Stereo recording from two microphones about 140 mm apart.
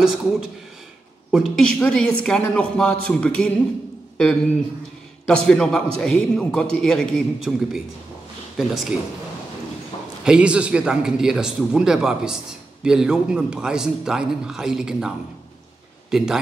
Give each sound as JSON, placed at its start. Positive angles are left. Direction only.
{"t": 0.0, "sound": "a man's voice", "side_deg": -5}
{"t": 5.2, "sound": "a man's voice", "side_deg": 5}
{"t": 10.2, "sound": "a man's voice", "side_deg": -5}